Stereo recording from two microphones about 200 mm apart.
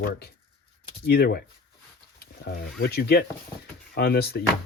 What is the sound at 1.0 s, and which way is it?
Speech, 55° left (ahead or behind).